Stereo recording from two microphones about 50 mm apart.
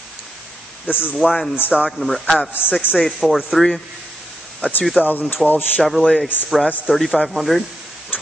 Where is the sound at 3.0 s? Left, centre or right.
Centre.